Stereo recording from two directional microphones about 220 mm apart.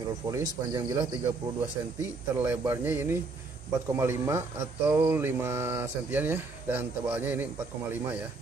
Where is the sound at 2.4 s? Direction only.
10° right (ahead or behind).